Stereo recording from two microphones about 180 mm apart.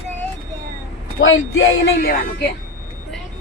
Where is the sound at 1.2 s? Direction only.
90° left.